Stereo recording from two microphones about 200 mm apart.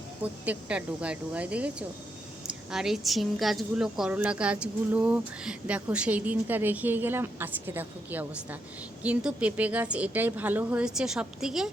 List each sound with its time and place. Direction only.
0.2 s a woman's voice: 5° right (ahead or behind)